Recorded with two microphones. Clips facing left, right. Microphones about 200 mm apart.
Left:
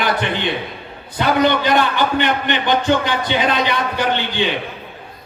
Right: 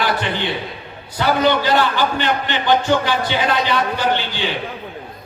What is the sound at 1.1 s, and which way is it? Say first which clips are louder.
A man's voice: left 1 dB; 20° left (ahead or behind).